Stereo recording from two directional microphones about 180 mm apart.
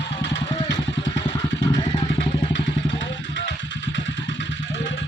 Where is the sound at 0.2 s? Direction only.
90° left.